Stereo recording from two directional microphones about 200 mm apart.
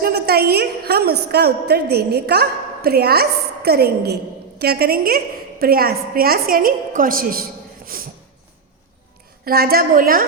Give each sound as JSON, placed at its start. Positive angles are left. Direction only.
{"t": 0.0, "sound": "a woman's voice", "side_deg": -50}
{"t": 7.9, "sound": "a sound", "side_deg": -45}
{"t": 9.4, "sound": "a woman's voice", "side_deg": -50}